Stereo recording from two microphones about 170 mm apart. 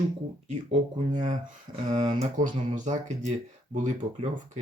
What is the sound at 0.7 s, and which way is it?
Speech, 45° right (ahead or behind).